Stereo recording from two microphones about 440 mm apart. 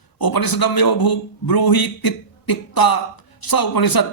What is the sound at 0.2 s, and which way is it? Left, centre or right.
A man's voice, left.